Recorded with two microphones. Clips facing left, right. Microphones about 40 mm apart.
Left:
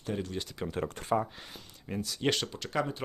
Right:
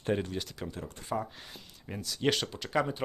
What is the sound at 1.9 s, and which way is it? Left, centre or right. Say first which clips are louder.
Speech: even; centre.